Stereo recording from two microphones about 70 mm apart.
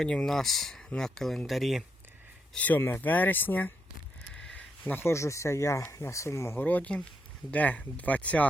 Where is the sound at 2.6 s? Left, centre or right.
Left.